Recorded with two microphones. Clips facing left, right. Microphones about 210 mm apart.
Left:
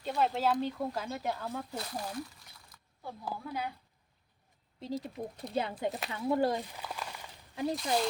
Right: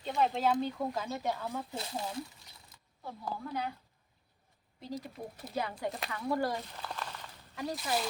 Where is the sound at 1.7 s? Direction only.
25° right (ahead or behind).